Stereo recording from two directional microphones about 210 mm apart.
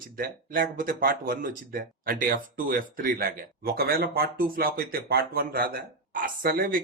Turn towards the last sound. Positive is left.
turn(degrees=-45)  # may be behind; listen again after turning